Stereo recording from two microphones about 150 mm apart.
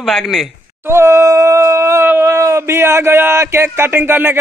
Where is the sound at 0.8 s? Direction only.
15° right (ahead or behind).